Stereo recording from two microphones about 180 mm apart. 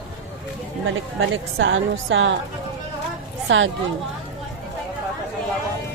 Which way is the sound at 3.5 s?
90° right.